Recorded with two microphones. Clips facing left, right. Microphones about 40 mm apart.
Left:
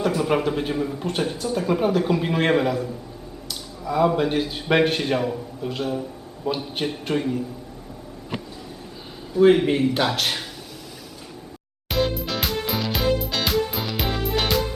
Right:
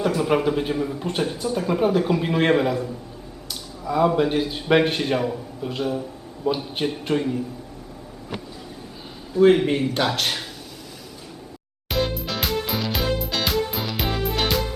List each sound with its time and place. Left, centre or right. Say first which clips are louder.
0.0 s a man's voice: right 1 dB; centre
9.3 s a man's voice: even; centre
11.9 s music: left 1 dB; centre